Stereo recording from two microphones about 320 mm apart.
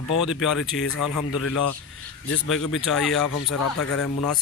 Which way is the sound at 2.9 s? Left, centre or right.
Centre.